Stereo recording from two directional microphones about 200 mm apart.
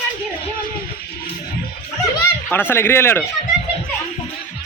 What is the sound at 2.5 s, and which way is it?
Speech, 10° left (ahead or behind).